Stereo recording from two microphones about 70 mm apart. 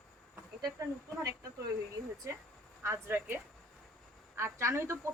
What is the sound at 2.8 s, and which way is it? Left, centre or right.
Speech, right.